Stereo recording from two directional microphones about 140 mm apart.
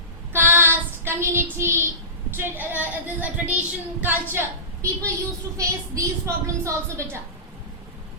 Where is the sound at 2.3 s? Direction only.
15° right (ahead or behind).